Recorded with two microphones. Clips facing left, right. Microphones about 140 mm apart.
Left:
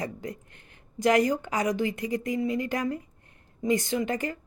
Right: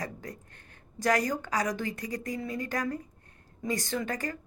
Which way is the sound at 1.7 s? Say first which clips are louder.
Left 6 dB; 45° right (ahead or behind).